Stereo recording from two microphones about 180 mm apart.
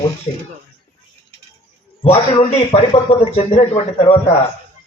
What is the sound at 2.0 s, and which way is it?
A man's voice, 35° left (ahead or behind).